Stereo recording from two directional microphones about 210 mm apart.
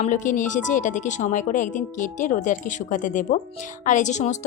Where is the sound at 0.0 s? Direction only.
35° left (ahead or behind).